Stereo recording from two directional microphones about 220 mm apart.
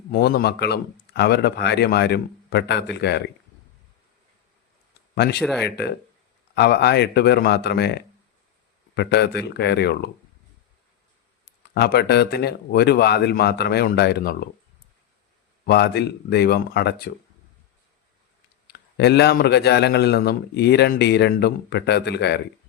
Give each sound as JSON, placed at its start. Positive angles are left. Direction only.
{"t": 0.1, "sound": "a man's voice", "side_deg": 45}
{"t": 5.1, "sound": "speech", "side_deg": 50}
{"t": 5.4, "sound": "speech", "side_deg": 0}
{"t": 5.6, "sound": "a man's voice", "side_deg": 45}
{"t": 9.0, "sound": "a man's voice", "side_deg": 50}
{"t": 11.7, "sound": "a man's voice", "side_deg": 45}
{"t": 15.6, "sound": "a man's voice", "side_deg": 45}
{"t": 18.7, "sound": "a man's voice", "side_deg": 50}